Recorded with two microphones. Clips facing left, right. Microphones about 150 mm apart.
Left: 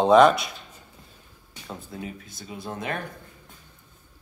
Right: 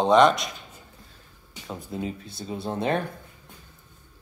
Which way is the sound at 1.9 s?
25° right (ahead or behind).